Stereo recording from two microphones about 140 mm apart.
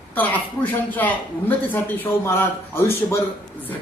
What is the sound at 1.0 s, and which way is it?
A man's voice, 15° left (ahead or behind).